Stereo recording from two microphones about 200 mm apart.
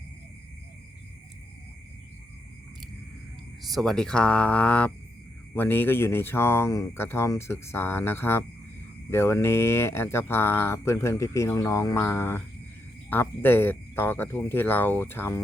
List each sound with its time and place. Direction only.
3.6 s speech: centre (ahead or behind)